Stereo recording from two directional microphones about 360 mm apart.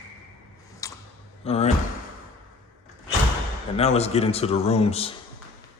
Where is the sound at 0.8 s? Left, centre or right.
Centre.